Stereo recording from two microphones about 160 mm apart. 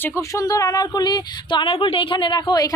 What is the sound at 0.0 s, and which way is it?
Speech, 20° left (ahead or behind).